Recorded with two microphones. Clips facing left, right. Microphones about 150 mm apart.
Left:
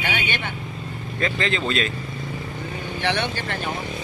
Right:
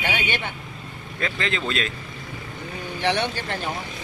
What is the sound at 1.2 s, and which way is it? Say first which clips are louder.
Speech: left 3 dB; centre (ahead or behind).